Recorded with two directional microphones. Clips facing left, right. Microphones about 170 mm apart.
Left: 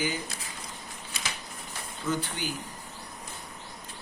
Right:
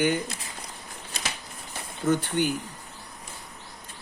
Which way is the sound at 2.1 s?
55° right (ahead or behind).